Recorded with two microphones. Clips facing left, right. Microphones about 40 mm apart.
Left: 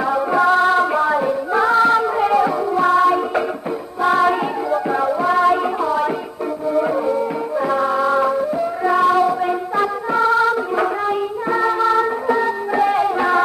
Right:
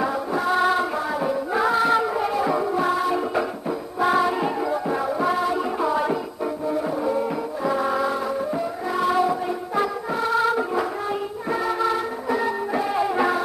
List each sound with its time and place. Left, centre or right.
0.4 s music: centre
0.9 s music: centre
1.5 s music: centre
7.6 s music: centre